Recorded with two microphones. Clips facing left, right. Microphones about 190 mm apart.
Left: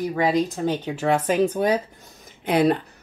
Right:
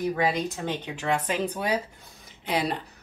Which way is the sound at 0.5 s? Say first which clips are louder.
Left 7 dB; 40° left (ahead or behind).